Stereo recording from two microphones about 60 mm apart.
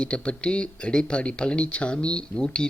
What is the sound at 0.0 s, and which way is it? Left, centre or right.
Speech, centre.